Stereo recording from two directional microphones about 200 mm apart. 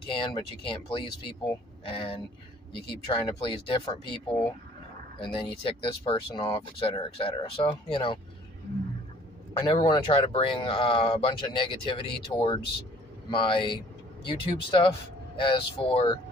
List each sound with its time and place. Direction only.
0.1 s speech: 25° left (ahead or behind)
9.6 s speech: 20° left (ahead or behind)